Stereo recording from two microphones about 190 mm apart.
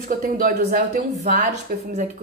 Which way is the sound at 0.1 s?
50° right (ahead or behind).